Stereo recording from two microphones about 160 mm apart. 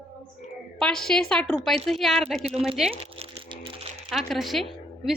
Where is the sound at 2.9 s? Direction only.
35° right (ahead or behind).